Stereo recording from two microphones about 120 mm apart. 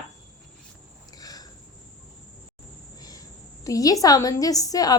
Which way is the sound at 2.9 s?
30° left (ahead or behind).